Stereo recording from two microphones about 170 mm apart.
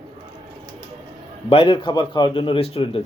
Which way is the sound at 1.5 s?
30° left (ahead or behind).